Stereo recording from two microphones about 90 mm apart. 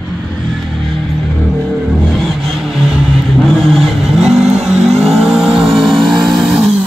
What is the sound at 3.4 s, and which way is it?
Vehicle, centre (ahead or behind).